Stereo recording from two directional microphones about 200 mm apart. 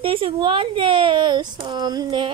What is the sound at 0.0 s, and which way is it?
Speech, 25° right (ahead or behind).